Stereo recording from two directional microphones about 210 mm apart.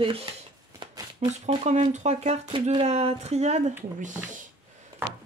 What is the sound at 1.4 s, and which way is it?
Speech, 35° right (ahead or behind).